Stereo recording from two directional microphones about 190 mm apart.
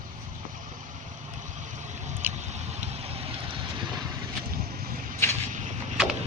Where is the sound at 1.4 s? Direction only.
40° right (ahead or behind).